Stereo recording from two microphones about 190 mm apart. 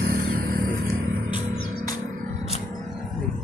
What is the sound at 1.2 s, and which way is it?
Music, 25° left (ahead or behind).